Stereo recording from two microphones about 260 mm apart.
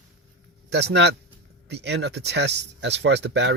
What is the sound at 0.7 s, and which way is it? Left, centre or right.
Speech, right.